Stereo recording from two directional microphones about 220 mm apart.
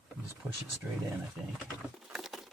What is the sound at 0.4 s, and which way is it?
Speech, 10° right (ahead or behind).